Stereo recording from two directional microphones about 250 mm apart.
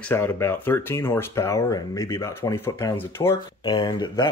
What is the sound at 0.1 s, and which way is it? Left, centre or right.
Speech, centre.